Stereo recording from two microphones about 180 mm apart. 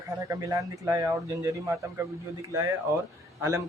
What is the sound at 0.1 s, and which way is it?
Speech, 20° right (ahead or behind).